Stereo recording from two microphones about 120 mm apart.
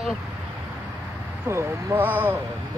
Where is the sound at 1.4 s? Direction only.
20° right (ahead or behind).